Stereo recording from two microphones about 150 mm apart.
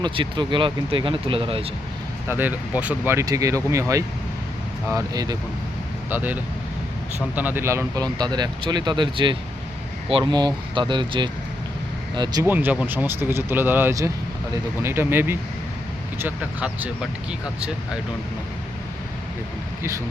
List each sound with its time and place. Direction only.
0.0 s speech: 30° right (ahead or behind)
2.2 s speech: 15° right (ahead or behind)
6.1 s speech: 10° right (ahead or behind); by 12.5 s 25° right (ahead or behind)
12.5 s speech: 10° right (ahead or behind)